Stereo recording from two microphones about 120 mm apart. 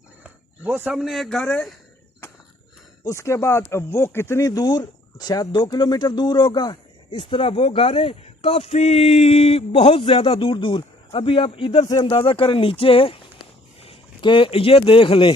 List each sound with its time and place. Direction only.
0.2 s a sound: 10° right (ahead or behind)
0.9 s speech: centre (ahead or behind)
3.1 s speech: 25° left (ahead or behind); by 15.4 s 45° left (ahead or behind)